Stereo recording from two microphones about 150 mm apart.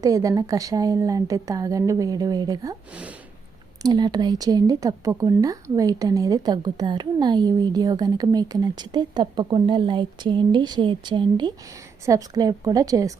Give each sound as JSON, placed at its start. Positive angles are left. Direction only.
{"t": 0.0, "sound": "speech", "side_deg": -25}
{"t": 2.9, "sound": "speech", "side_deg": -10}
{"t": 3.8, "sound": "speech", "side_deg": -30}